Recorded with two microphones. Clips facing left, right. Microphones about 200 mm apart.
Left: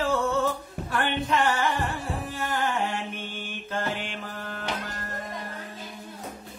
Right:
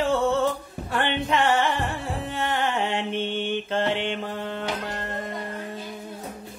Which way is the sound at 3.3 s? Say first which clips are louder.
Right 8 dB; 25° right (ahead or behind).